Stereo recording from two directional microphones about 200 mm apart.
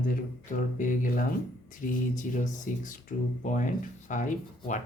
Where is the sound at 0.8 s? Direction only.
40° left (ahead or behind).